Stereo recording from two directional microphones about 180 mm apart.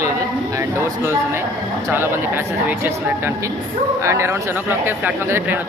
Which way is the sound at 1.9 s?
10° right (ahead or behind).